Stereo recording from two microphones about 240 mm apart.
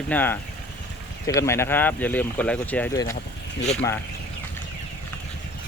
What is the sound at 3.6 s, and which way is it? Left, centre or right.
Speech, left.